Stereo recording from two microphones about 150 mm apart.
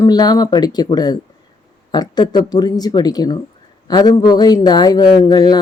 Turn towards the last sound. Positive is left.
turn(degrees=25)  # may be behind; listen again after turning